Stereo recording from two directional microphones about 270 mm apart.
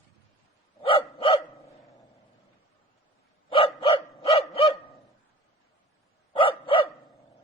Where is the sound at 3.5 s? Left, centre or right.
Left.